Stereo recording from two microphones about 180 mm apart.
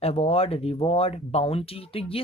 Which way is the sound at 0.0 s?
35° left (ahead or behind).